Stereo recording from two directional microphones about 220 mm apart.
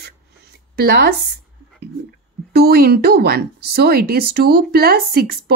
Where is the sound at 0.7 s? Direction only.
45° right (ahead or behind).